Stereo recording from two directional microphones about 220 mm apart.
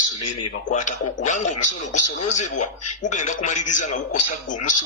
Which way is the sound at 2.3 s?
35° left (ahead or behind).